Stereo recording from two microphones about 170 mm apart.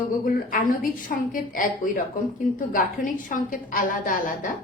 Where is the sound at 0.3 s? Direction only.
55° left (ahead or behind).